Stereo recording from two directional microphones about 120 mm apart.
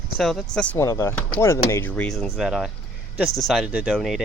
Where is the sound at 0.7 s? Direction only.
25° left (ahead or behind).